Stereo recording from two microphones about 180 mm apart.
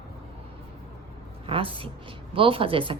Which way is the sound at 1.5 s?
30° right (ahead or behind).